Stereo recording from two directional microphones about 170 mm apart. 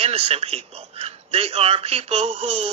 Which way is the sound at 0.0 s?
35° right (ahead or behind).